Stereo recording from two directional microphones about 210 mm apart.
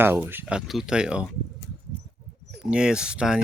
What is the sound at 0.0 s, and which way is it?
Speech, 10° right (ahead or behind).